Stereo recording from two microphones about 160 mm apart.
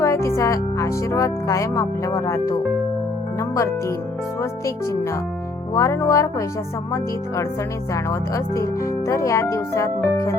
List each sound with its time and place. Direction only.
0.0 s speech: 15° left (ahead or behind)
7.9 s speech: 20° left (ahead or behind)